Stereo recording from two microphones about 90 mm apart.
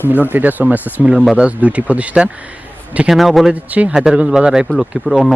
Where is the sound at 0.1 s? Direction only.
20° right (ahead or behind).